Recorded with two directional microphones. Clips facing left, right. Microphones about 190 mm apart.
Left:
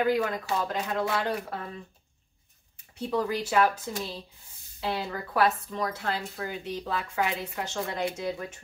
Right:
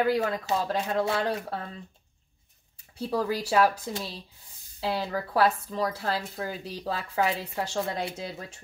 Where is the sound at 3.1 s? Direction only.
35° right (ahead or behind).